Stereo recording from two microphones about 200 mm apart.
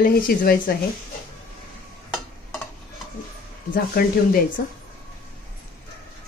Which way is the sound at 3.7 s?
45° left (ahead or behind).